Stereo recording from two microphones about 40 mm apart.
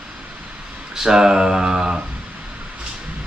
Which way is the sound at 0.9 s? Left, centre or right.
Centre.